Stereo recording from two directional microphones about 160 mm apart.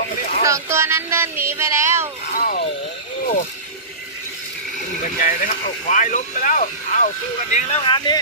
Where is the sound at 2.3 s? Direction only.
70° left (ahead or behind).